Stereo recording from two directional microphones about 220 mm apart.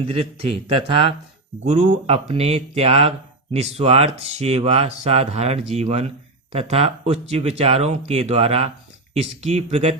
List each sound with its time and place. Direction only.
0.1 s speech: 25° right (ahead or behind)